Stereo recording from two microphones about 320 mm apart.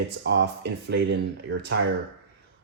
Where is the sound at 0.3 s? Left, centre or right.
Right.